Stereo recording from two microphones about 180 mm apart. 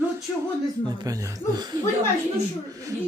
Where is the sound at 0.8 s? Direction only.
20° right (ahead or behind).